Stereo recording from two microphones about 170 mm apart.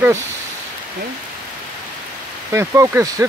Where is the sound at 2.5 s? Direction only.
15° right (ahead or behind).